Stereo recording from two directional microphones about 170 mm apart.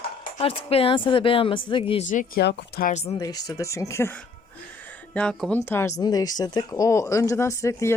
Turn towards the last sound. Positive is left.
turn(degrees=15)  # may be behind; listen again after turning